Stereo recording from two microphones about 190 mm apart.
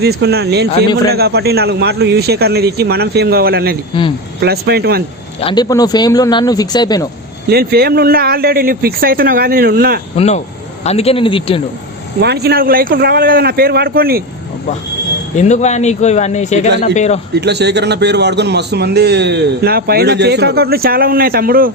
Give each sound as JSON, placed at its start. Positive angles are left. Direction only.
{"t": 0.0, "sound": "a man's voice", "side_deg": -55}
{"t": 5.4, "sound": "speech", "side_deg": 25}
{"t": 7.5, "sound": "speech", "side_deg": -55}
{"t": 10.2, "sound": "a man's voice", "side_deg": 35}
{"t": 12.2, "sound": "speech", "side_deg": -60}
{"t": 15.4, "sound": "a man's voice", "side_deg": 40}
{"t": 17.3, "sound": "a man's voice", "side_deg": -60}